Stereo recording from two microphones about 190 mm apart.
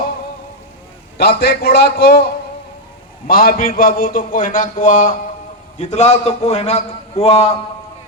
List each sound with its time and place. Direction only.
1.2 s a man's voice: 55° left (ahead or behind)
3.2 s a man's voice: 50° left (ahead or behind); by 7.6 s 30° left (ahead or behind)